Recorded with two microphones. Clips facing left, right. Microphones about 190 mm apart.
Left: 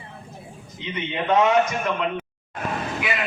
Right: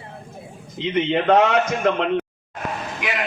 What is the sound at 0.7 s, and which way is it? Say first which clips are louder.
A man's voice: right 8 dB; 70° right (ahead or behind).